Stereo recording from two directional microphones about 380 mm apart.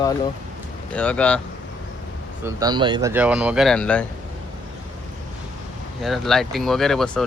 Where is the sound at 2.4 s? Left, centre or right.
Centre.